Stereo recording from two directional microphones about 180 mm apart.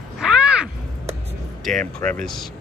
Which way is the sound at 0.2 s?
5° right (ahead or behind).